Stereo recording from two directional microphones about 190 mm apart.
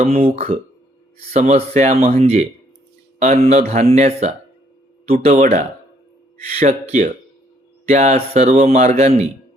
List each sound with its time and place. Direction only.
0.0 s speech: 30° right (ahead or behind)
6.6 s speech: 35° right (ahead or behind)